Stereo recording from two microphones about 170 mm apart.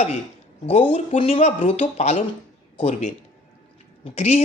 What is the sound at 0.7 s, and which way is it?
Speech, 35° left (ahead or behind).